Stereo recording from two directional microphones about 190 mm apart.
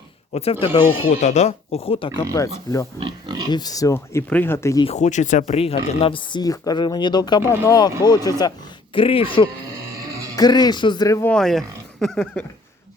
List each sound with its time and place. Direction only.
0.3 s speech: 30° left (ahead or behind)
3.0 s speech: 20° right (ahead or behind)
3.5 s a man's voice: 20° left (ahead or behind)
4.9 s a man's voice: 40° left (ahead or behind); by 12.5 s 5° left (ahead or behind)